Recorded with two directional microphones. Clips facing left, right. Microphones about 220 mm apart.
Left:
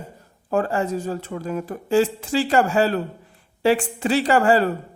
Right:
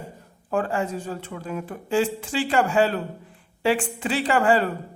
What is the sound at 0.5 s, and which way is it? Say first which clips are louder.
Speech: left 3 dB; 40° left (ahead or behind).